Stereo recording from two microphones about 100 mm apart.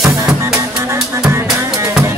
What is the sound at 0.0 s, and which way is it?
Music, 5° right (ahead or behind).